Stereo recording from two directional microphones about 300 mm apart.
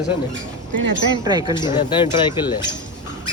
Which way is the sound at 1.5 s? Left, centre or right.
Centre.